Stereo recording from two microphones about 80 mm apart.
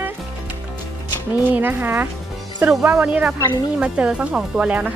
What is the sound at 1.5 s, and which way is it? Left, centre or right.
Speech, right.